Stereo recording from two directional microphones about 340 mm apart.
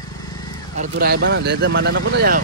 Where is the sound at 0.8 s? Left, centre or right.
Right.